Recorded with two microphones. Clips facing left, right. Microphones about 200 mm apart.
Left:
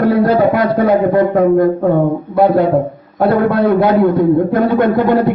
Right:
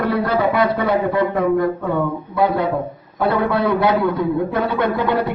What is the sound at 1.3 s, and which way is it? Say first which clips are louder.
Speech: left 7 dB; 40° left (ahead or behind).